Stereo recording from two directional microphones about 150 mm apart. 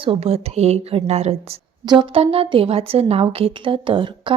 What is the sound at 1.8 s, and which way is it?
A woman's voice, 35° right (ahead or behind).